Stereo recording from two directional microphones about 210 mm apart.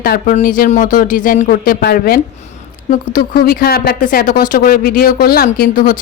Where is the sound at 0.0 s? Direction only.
45° left (ahead or behind).